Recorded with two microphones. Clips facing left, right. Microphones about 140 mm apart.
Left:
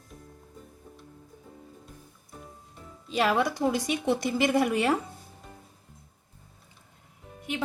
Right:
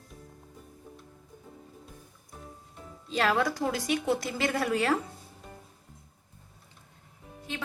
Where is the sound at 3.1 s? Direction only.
15° left (ahead or behind).